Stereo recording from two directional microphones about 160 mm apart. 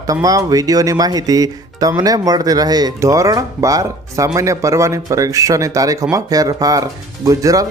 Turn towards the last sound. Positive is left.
turn(degrees=-20)  # may be behind; listen again after turning